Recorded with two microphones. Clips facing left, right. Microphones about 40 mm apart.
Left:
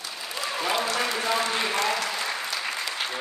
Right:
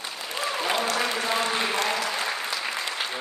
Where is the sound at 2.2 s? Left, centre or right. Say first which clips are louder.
Right 1 dB; centre.